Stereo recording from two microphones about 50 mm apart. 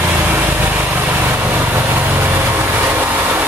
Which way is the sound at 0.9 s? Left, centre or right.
Right.